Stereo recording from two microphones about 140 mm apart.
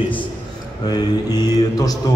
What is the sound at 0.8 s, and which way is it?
Speech, 30° left (ahead or behind).